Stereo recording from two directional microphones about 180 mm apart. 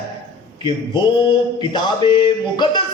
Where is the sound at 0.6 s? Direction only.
25° left (ahead or behind).